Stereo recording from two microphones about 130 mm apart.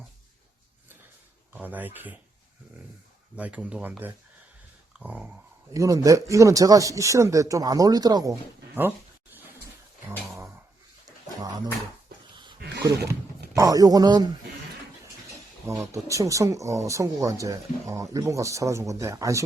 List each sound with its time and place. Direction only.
1.5 s speech: 15° right (ahead or behind)
3.3 s speech: 10° right (ahead or behind)
5.7 s speech: 25° right (ahead or behind)
10.1 s a sound: 15° right (ahead or behind)
12.4 s wild animals: 35° right (ahead or behind)
13.6 s speech: 25° right (ahead or behind)
15.9 s speech: 25° right (ahead or behind)